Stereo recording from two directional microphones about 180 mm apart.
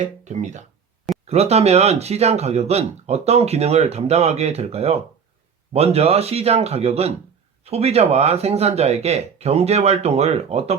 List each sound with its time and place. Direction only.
0.0 s speech: 40° right (ahead or behind)